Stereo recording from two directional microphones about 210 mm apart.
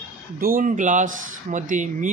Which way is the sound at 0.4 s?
40° right (ahead or behind).